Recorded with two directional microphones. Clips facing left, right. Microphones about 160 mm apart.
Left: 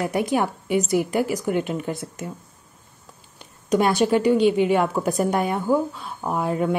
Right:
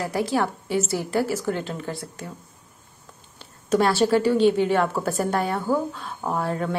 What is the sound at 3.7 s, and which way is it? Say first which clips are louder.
A woman's voice: even; 15° left (ahead or behind).